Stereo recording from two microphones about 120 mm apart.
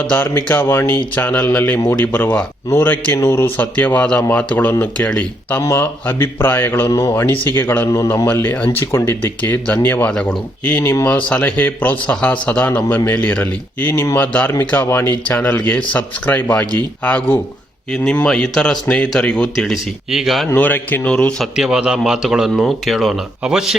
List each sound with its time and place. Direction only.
0.0 s speech: 15° left (ahead or behind)
5.6 s a man's voice: 25° left (ahead or behind); by 20.5 s centre (ahead or behind)
20.5 s a man's voice: 15° left (ahead or behind); by 23.7 s 5° right (ahead or behind)